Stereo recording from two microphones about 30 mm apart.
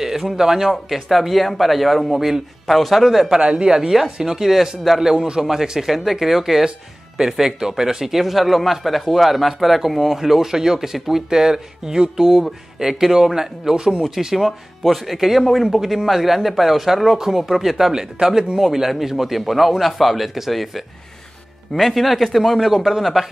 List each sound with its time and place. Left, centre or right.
0.0 s speech: centre
0.7 s speech: centre
2.1 s speech: centre
2.6 s speech: centre
3.3 s speech: right
3.6 s speech: right
4.5 s speech: centre
5.0 s speech: right
14.2 s speech: centre
15.1 s speech: centre
17.9 s speech: right
18.6 s speech: centre